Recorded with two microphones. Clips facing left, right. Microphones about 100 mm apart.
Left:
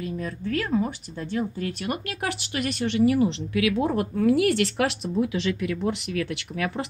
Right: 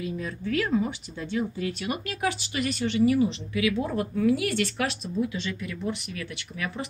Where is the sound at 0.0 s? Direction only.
45° left (ahead or behind).